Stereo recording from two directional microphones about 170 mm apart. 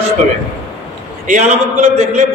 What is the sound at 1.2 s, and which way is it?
A man's voice, 45° right (ahead or behind).